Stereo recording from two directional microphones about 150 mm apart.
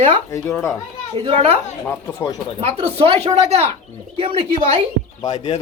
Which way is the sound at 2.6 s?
40° right (ahead or behind).